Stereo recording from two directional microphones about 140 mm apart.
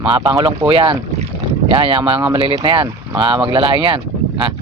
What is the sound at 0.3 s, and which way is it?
Speech, 25° right (ahead or behind).